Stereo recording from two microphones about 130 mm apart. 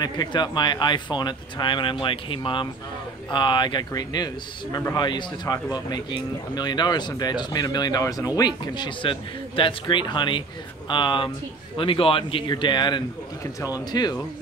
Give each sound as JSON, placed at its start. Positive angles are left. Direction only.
{"t": 0.0, "sound": "a man's voice", "side_deg": 35}